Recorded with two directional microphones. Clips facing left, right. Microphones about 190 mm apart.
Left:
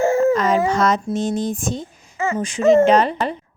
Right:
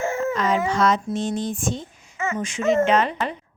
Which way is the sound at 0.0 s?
35° left (ahead or behind).